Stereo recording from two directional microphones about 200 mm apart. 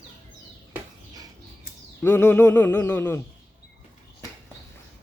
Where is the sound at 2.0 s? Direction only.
10° left (ahead or behind).